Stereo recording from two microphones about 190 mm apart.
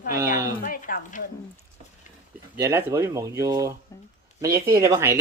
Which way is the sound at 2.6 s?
15° right (ahead or behind).